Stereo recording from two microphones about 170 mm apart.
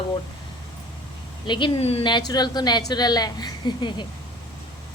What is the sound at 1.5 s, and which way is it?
Speech, 30° left (ahead or behind).